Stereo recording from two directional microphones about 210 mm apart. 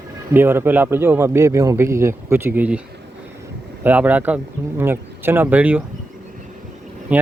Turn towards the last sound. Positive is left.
turn(degrees=-5)  # may be behind; listen again after turning